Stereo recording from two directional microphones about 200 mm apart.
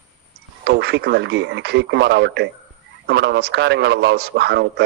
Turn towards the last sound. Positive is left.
turn(degrees=-60)  # may be behind; listen again after turning